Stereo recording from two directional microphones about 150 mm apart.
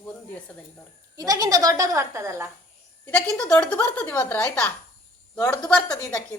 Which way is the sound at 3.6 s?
10° left (ahead or behind).